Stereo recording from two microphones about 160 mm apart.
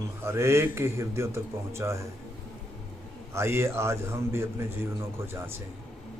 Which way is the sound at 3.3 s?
15° right (ahead or behind).